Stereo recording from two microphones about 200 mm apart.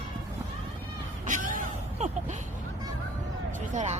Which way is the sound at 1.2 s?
40° right (ahead or behind).